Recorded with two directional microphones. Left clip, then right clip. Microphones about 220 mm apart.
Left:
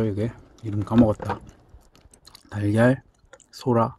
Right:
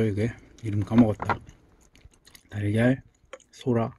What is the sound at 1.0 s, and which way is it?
Chewing, 20° left (ahead or behind).